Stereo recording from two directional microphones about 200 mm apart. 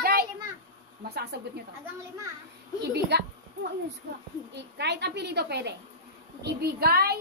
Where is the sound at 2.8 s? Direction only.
55° right (ahead or behind).